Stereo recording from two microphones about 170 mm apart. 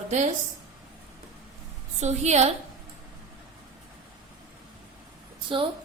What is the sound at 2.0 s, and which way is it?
Speech, 40° right (ahead or behind).